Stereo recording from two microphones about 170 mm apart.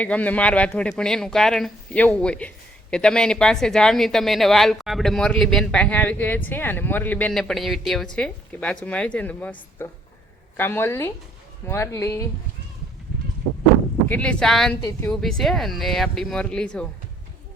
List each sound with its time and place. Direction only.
0.0 s speech: 10° left (ahead or behind)
14.1 s speech: 5° left (ahead or behind)